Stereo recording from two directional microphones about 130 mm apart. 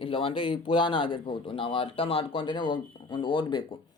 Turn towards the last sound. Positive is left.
turn(degrees=40)  # may be behind; listen again after turning